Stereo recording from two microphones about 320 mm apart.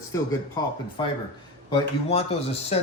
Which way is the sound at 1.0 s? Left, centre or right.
Centre.